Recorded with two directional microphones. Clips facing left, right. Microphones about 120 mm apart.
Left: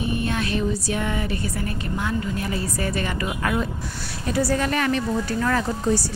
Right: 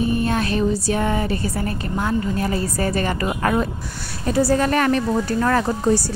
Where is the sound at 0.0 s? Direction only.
35° right (ahead or behind).